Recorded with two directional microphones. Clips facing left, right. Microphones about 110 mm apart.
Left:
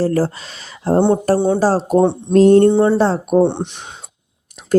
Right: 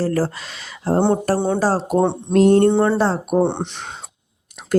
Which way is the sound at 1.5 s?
30° left (ahead or behind).